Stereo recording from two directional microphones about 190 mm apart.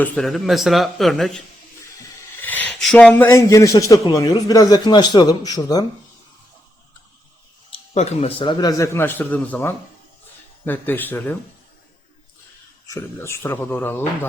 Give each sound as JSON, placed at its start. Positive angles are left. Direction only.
{"t": 0.0, "sound": "speech", "side_deg": 0}
{"t": 2.4, "sound": "a man's voice", "side_deg": 10}
{"t": 7.7, "sound": "a man's voice", "side_deg": 35}
{"t": 12.9, "sound": "a man's voice", "side_deg": 15}